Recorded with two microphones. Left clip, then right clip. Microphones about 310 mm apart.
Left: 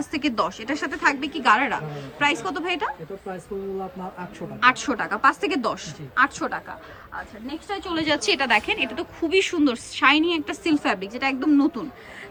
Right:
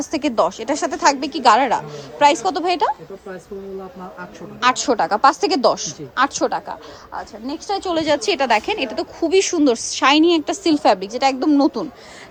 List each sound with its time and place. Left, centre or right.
0.0 s a woman's voice: centre
4.6 s a woman's voice: centre